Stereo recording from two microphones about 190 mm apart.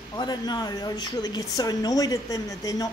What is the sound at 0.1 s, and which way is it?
A woman's voice, 20° left (ahead or behind).